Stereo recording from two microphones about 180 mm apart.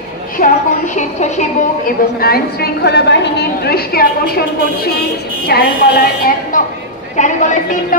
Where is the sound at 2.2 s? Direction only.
60° left (ahead or behind).